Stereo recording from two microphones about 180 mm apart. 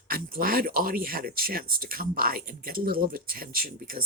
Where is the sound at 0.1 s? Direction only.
55° right (ahead or behind).